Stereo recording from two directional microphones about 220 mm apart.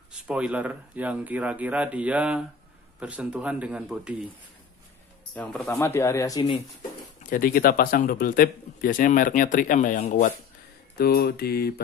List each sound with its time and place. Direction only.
0.1 s a man's voice: 5° right (ahead or behind)
5.3 s speech: 5° left (ahead or behind)
7.2 s a man's voice: 40° left (ahead or behind)
11.0 s mantra: 45° left (ahead or behind)